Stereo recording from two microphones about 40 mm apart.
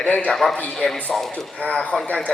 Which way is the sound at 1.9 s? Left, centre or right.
Centre.